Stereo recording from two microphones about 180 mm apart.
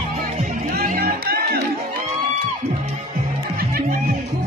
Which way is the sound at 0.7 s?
55° right (ahead or behind).